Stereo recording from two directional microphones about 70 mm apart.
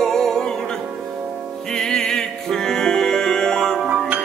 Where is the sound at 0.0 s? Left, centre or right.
Centre.